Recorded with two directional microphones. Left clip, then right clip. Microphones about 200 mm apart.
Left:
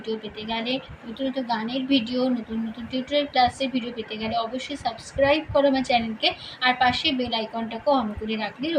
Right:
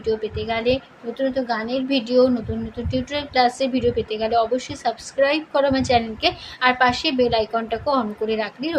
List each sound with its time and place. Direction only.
0.0 s a woman's voice: 45° right (ahead or behind)